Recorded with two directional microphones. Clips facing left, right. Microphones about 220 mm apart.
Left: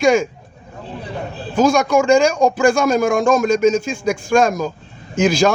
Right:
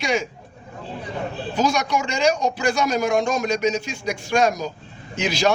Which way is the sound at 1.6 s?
50° left (ahead or behind).